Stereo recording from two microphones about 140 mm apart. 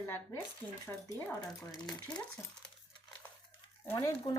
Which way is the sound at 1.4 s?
5° left (ahead or behind).